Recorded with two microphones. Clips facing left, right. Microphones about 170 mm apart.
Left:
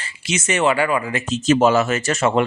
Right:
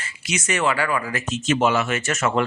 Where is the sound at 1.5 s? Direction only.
40° left (ahead or behind).